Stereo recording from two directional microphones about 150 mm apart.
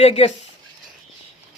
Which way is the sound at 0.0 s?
40° left (ahead or behind).